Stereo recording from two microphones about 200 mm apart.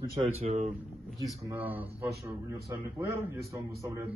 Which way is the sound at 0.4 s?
35° right (ahead or behind).